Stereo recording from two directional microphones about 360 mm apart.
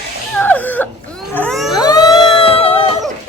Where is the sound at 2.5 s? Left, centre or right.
Centre.